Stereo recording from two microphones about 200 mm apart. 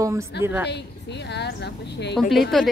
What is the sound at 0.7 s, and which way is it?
A woman's voice, 60° left (ahead or behind).